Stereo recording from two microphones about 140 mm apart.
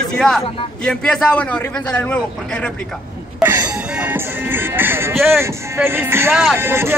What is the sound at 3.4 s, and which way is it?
Music, 15° right (ahead or behind).